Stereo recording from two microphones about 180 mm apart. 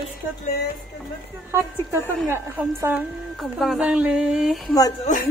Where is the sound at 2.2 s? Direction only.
15° right (ahead or behind).